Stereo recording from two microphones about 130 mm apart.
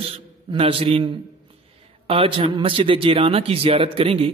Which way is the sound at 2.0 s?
45° right (ahead or behind).